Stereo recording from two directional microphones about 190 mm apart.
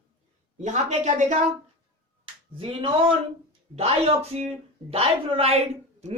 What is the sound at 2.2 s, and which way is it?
Finger snapping, 30° right (ahead or behind).